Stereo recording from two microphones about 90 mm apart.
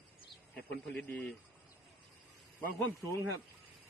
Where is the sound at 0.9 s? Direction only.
5° left (ahead or behind).